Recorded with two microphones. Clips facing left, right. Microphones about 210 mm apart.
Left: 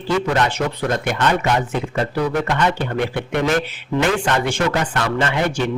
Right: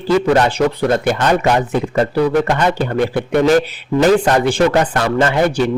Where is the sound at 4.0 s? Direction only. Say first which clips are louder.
Right 7 dB; 35° right (ahead or behind).